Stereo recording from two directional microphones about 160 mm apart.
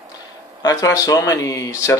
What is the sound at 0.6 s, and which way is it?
Speech, 20° left (ahead or behind).